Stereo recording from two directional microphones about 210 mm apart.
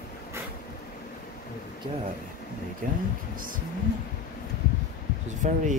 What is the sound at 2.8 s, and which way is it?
Speech, 40° right (ahead or behind).